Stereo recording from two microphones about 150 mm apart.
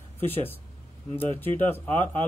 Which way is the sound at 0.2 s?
15° left (ahead or behind).